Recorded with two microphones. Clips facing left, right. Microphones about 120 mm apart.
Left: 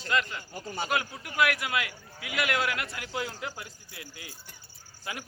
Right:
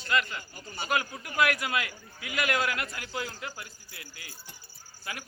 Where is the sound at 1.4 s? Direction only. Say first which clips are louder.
Even; 5° left (ahead or behind).